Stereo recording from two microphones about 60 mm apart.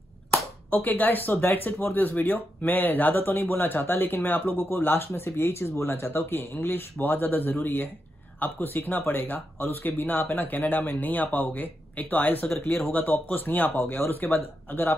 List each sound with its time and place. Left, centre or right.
0.3 s speech: left